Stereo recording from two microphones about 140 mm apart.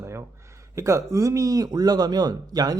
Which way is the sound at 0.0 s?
20° right (ahead or behind).